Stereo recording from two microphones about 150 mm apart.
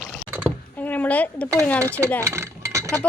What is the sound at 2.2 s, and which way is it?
Chink, 20° right (ahead or behind).